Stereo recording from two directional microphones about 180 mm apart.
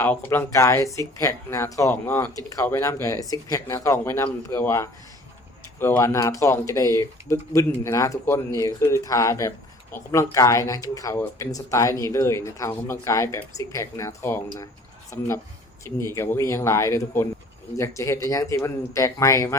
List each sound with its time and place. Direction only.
0.0 s speech: 10° left (ahead or behind)